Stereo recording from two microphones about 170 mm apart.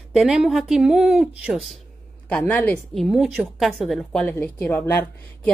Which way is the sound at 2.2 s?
10° left (ahead or behind).